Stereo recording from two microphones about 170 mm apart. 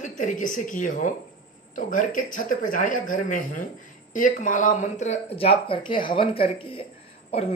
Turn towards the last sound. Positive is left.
turn(degrees=35)  # may be behind; listen again after turning